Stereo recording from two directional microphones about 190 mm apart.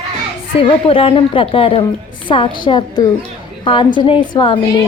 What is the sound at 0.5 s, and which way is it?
A woman's voice, 30° left (ahead or behind).